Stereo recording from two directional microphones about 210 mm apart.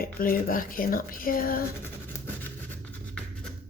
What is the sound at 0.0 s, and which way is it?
Speech, 45° left (ahead or behind).